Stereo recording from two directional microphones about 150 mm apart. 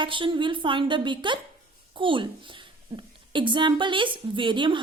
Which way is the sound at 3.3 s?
35° right (ahead or behind).